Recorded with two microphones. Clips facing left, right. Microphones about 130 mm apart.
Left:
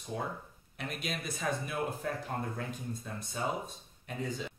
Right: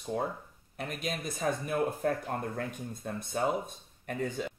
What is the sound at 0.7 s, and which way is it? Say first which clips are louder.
Speech: right 3 dB; 40° right (ahead or behind).